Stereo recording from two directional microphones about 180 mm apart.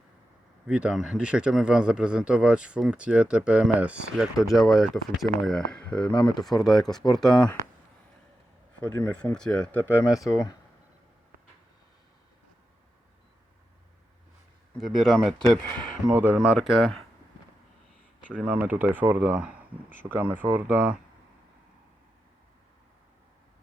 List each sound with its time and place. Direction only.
0.7 s speech: 5° right (ahead or behind)
9.0 s speech: 5° left (ahead or behind)
14.8 s speech: centre (ahead or behind)
15.7 s speech: 25° right (ahead or behind)
16.1 s speech: 10° right (ahead or behind)
18.3 s speech: 5° right (ahead or behind)